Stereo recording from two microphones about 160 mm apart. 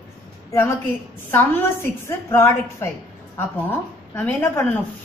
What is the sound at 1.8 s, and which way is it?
A woman's voice, 15° left (ahead or behind).